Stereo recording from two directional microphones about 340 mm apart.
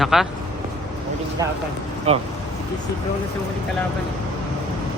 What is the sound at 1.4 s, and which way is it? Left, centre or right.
Speech, centre.